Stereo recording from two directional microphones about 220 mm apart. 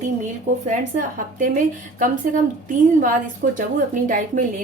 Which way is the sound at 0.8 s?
35° right (ahead or behind).